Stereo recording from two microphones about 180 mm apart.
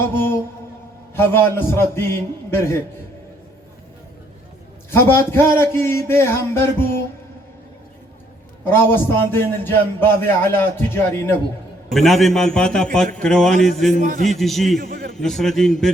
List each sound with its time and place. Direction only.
0.1 s mantra: 10° left (ahead or behind)
1.1 s a man's voice: 15° left (ahead or behind)
4.9 s a man's voice: 15° left (ahead or behind)
8.6 s a man's voice: 10° left (ahead or behind)
11.9 s a man's voice: centre (ahead or behind)
14.0 s a man's voice: 50° right (ahead or behind)
14.3 s a man's voice: centre (ahead or behind)
14.8 s a man's voice: 60° right (ahead or behind)
15.1 s a man's voice: centre (ahead or behind)